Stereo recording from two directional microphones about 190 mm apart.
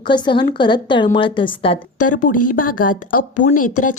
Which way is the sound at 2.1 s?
45° left (ahead or behind).